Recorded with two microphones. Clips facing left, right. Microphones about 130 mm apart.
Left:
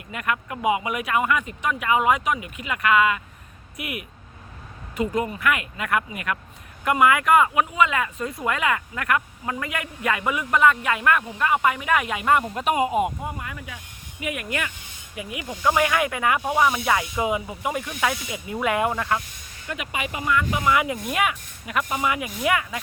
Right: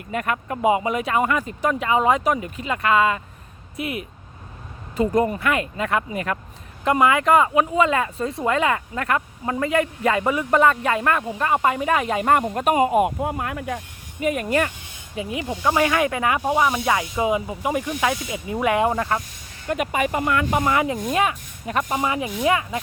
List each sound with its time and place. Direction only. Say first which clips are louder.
0.1 s speech: right 3 dB; 35° right (ahead or behind)
19.6 s speech: right 8 dB; 45° right (ahead or behind)
20.7 s speech: right 1 dB; 30° right (ahead or behind)